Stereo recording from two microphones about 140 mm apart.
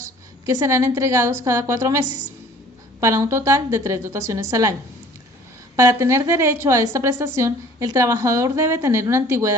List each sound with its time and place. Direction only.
0.0 s a woman's voice: 20° right (ahead or behind)
5.7 s a woman's voice: 20° right (ahead or behind)